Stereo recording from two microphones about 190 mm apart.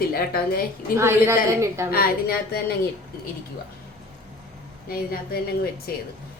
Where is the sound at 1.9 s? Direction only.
55° left (ahead or behind).